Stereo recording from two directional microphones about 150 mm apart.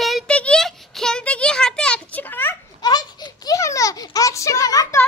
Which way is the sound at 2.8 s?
25° left (ahead or behind).